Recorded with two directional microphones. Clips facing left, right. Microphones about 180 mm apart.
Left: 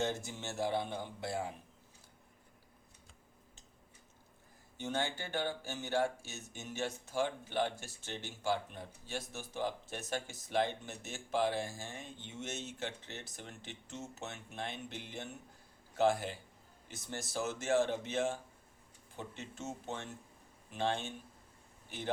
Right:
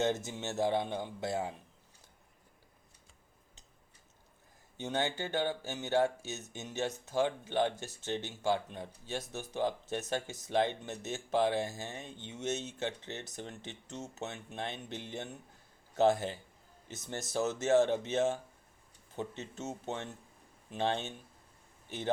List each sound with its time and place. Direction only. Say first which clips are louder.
0.0 s speech: right 4 dB; 20° right (ahead or behind)
4.8 s speech: right 3 dB; 20° right (ahead or behind)